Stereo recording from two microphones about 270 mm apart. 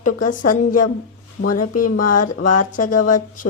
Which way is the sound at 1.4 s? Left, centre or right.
Left.